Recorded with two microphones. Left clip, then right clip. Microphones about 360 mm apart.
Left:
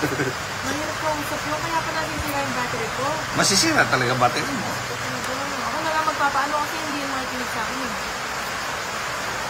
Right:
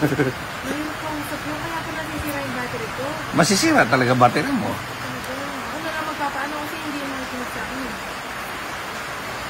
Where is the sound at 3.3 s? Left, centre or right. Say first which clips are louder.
Right 3 dB; centre.